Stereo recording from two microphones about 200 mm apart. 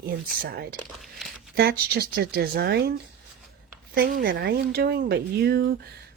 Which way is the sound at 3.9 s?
50° right (ahead or behind).